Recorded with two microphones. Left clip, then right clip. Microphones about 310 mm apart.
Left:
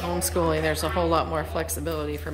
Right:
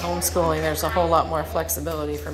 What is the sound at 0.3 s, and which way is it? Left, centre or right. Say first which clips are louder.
Speech: right 2 dB; left.